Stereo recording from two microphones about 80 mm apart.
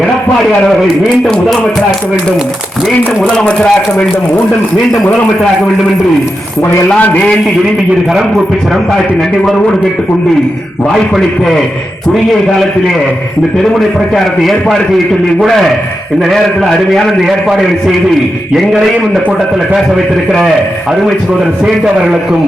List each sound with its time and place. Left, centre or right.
3.2 s speech: centre
6.8 s a man's voice: centre
8.1 s a man's voice: centre
10.8 s a man's voice: centre
21.6 s a man's voice: centre